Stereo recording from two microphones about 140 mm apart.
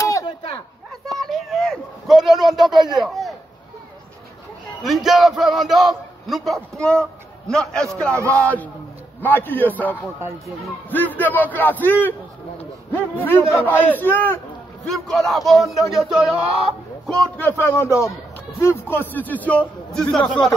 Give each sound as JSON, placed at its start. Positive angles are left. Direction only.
{"t": 0.0, "sound": "a sound", "side_deg": 20}
{"t": 1.0, "sound": "a sound", "side_deg": 0}
{"t": 4.8, "sound": "a man's voice", "side_deg": 0}
{"t": 8.1, "sound": "speech", "side_deg": -20}
{"t": 8.4, "sound": "a man's voice", "side_deg": 10}
{"t": 14.9, "sound": "a man's voice", "side_deg": 0}
{"t": 16.6, "sound": "fowl", "side_deg": 0}
{"t": 17.4, "sound": "a man's voice", "side_deg": 15}